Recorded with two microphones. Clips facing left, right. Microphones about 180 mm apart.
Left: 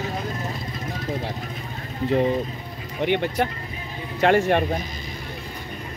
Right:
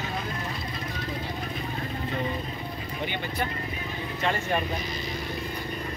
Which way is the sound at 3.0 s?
70° left (ahead or behind).